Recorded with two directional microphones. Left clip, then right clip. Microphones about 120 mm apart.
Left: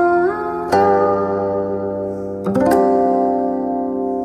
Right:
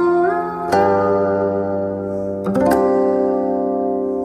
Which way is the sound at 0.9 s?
10° right (ahead or behind).